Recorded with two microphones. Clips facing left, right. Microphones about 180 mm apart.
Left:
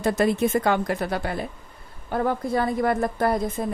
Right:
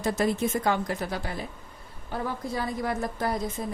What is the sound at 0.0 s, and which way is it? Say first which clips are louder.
Speech: left 5 dB; 60° left (ahead or behind).